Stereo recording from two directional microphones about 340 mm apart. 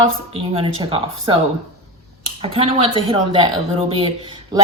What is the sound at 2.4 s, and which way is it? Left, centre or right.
A woman's voice, centre.